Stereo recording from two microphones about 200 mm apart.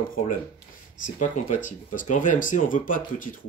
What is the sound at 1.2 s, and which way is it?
Speech, 40° left (ahead or behind).